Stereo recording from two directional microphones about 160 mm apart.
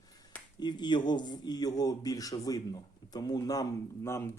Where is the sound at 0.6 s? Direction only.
25° left (ahead or behind).